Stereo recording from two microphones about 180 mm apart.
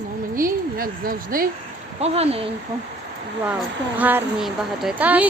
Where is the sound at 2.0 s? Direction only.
35° right (ahead or behind).